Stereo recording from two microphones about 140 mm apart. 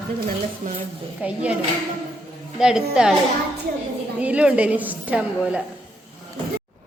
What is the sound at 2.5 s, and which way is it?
Speech, 5° right (ahead or behind).